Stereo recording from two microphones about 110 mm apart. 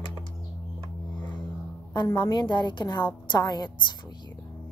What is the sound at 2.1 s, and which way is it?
Speech, 40° left (ahead or behind).